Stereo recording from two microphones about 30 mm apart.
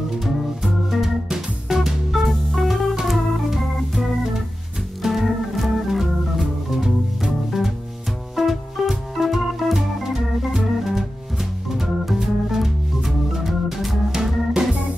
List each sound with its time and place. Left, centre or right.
0.2 s organ: centre
1.8 s music: centre
2.5 s music: centre
3.1 s organ: centre
8.4 s music: centre
10.5 s organ: centre
14.1 s organ: right